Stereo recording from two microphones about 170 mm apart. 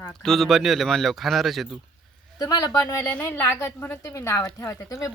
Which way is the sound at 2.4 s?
20° left (ahead or behind).